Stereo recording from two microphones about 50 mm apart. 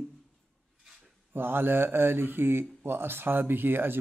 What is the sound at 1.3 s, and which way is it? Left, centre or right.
Speech, right.